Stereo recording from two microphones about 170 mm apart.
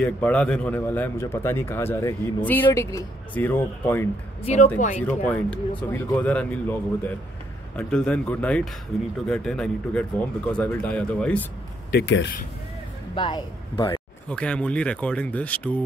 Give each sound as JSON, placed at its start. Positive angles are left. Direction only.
{"t": 0.0, "sound": "a man's voice", "side_deg": 5}
{"t": 11.9, "sound": "speech", "side_deg": 85}
{"t": 13.1, "sound": "speech", "side_deg": 30}
{"t": 14.3, "sound": "a man's voice", "side_deg": 5}